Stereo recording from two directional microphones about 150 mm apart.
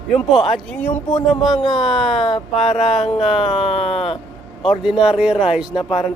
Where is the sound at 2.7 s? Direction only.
45° left (ahead or behind).